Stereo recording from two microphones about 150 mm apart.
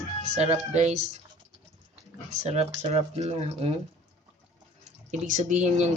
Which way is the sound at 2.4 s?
45° right (ahead or behind).